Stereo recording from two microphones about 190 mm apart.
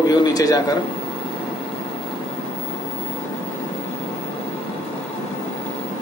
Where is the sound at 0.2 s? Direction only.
20° left (ahead or behind).